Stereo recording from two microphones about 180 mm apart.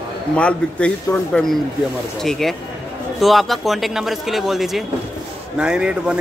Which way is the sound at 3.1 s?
Centre (ahead or behind).